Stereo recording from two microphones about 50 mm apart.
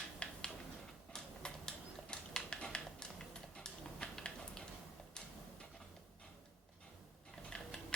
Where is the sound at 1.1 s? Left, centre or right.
Centre.